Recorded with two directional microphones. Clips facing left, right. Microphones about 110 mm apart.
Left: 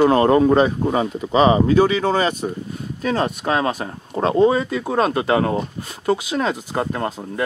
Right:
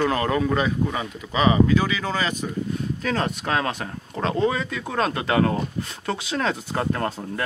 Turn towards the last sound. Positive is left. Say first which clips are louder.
# left 2 dB
turn(degrees=15)  # may be behind; listen again after turning